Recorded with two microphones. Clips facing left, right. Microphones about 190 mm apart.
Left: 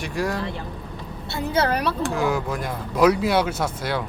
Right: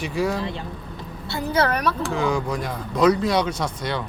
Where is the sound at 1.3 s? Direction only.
25° left (ahead or behind).